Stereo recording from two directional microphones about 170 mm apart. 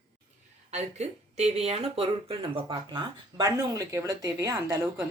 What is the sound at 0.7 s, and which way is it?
Speech, 40° right (ahead or behind).